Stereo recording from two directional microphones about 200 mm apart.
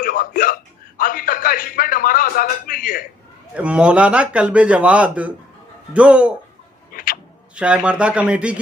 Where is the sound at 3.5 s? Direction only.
5° right (ahead or behind).